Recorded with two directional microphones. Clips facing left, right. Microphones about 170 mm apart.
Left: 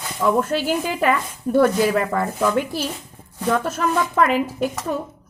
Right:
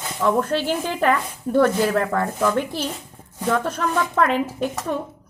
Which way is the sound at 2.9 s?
10° right (ahead or behind).